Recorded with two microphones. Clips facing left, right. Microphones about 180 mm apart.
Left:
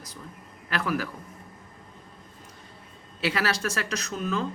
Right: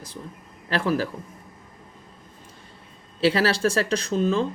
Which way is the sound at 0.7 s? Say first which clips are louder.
Right 5 dB; 30° right (ahead or behind).